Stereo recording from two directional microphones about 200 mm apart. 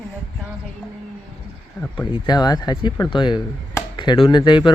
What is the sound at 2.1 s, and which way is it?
Speech, 20° left (ahead or behind).